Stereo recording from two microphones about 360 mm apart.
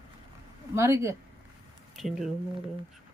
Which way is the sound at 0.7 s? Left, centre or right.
Centre.